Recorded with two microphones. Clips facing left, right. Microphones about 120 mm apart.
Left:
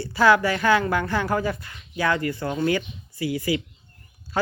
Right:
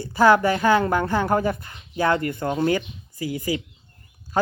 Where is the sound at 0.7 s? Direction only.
40° right (ahead or behind).